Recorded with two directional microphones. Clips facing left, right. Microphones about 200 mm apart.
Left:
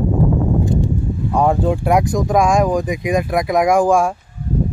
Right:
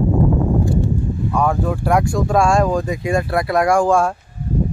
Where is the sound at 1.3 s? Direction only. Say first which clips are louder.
Left 4 dB; 30° left (ahead or behind).